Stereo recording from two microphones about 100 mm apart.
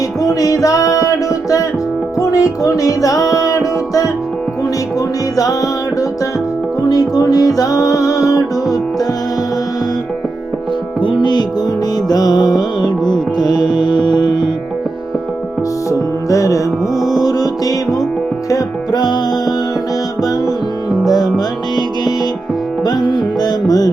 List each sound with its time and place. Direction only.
0.2 s music: 40° left (ahead or behind)
6.8 s music: 40° left (ahead or behind)
11.0 s music: 50° left (ahead or behind)
15.9 s music: 30° left (ahead or behind)
21.1 s music: 40° left (ahead or behind)